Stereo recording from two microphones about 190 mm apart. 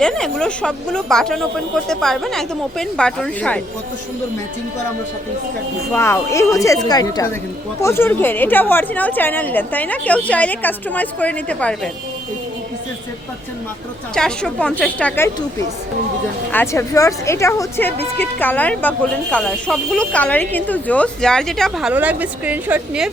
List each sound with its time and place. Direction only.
0.0 s speech: 5° left (ahead or behind)
5.9 s a woman's voice: 15° left (ahead or behind)
14.2 s speech: 5° left (ahead or behind)
16.5 s a woman's voice: 10° left (ahead or behind); by 23.0 s 10° right (ahead or behind)